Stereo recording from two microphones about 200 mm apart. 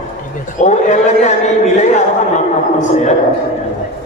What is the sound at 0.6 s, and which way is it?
Speech, 35° left (ahead or behind).